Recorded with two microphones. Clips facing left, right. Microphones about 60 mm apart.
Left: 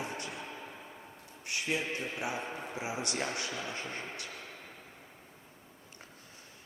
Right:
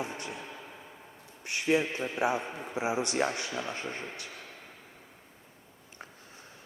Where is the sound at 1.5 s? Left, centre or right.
Right.